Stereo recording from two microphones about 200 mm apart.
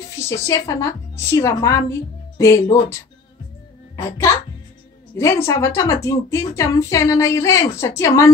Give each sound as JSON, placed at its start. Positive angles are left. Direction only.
{"t": 0.2, "sound": "a woman's voice", "side_deg": 15}